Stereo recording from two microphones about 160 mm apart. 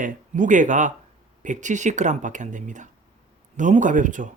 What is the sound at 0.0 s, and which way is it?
Speech, 55° right (ahead or behind).